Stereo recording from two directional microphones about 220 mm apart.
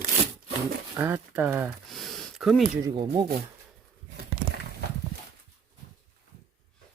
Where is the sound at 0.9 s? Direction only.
10° right (ahead or behind).